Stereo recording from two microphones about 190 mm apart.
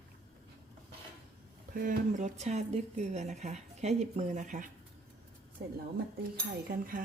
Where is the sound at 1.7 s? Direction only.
45° right (ahead or behind).